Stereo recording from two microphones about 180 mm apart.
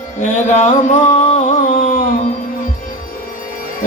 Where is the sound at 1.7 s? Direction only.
50° left (ahead or behind).